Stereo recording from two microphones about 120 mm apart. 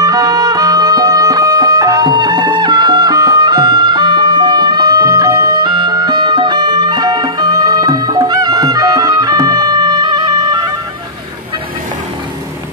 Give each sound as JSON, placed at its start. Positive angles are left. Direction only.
{"t": 0.0, "sound": "music", "side_deg": -30}